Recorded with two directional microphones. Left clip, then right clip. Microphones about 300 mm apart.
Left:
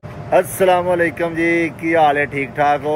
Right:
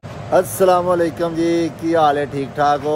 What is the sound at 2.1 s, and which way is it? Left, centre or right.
Speech, right.